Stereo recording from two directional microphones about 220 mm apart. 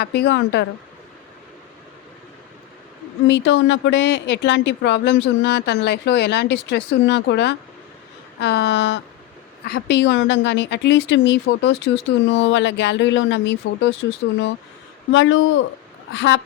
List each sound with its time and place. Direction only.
0.0 s speech: 50° left (ahead or behind)
3.2 s speech: 55° left (ahead or behind)